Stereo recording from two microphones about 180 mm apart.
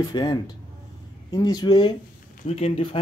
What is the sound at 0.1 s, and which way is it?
Speech, 25° left (ahead or behind).